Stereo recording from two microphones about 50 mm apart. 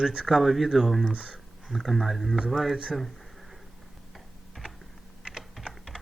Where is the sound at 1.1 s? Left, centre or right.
Right.